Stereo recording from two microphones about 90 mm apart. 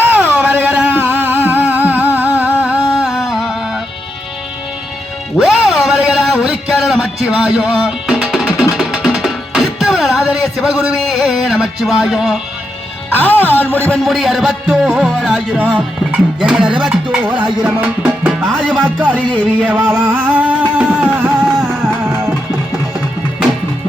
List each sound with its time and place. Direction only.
0.1 s music: 15° right (ahead or behind)
2.8 s music: 5° right (ahead or behind)
5.4 s a sound: centre (ahead or behind)
6.7 s music: 5° right (ahead or behind)
13.1 s music: 20° left (ahead or behind)
14.0 s music: centre (ahead or behind)
15.5 s music: 15° right (ahead or behind)
16.7 s speech: 10° right (ahead or behind)
17.4 s music: 20° right (ahead or behind)
18.4 s music: 10° left (ahead or behind)
18.9 s music: 15° right (ahead or behind)